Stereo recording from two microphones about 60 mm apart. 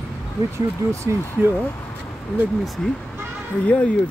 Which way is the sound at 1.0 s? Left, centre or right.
Left.